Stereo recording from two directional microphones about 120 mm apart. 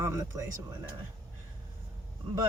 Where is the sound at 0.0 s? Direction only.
25° right (ahead or behind).